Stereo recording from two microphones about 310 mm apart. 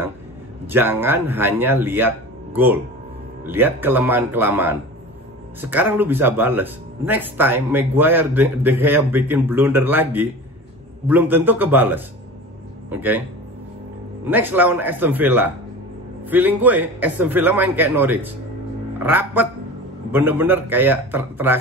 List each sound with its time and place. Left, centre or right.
0.7 s a man's voice: centre
14.2 s a man's voice: centre